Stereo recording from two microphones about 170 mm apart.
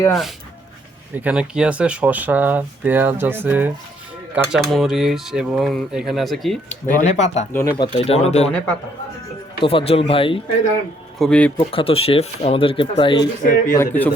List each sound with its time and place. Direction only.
0.1 s speech: centre (ahead or behind)
4.5 s speech: centre (ahead or behind)
6.8 s speech: 45° left (ahead or behind)
7.5 s speech: 20° left (ahead or behind)
7.9 s speech: 35° left (ahead or behind)
8.4 s speech: 5° left (ahead or behind)
9.6 s speech: 35° left (ahead or behind)
11.2 s speech: 5° left (ahead or behind)
11.5 s speech: 30° left (ahead or behind)
13.4 s speech: 55° left (ahead or behind)
13.7 s speech: 10° left (ahead or behind)